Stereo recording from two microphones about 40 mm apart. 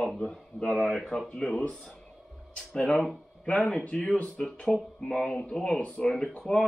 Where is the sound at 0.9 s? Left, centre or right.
Centre.